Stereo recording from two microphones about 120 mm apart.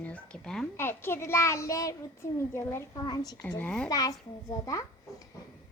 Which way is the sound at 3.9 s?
30° left (ahead or behind).